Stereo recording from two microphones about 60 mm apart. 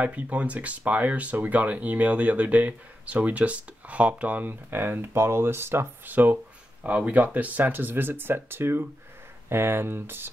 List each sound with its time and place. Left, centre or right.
0.0 s speech: right
6.0 s speech: right
6.3 s a sound: right
7.3 s speech: right